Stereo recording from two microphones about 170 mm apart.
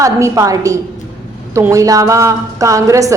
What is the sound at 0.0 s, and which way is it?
A woman's voice, 20° right (ahead or behind).